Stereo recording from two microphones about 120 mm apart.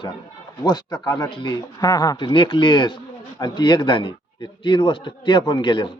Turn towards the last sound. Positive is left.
turn(degrees=40)  # may be behind; listen again after turning